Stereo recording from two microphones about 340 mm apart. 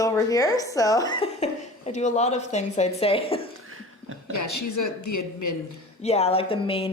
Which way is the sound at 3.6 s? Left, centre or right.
Right.